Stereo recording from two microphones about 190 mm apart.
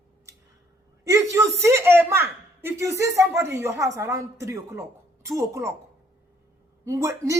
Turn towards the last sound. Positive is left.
turn(degrees=-15)  # may be behind; listen again after turning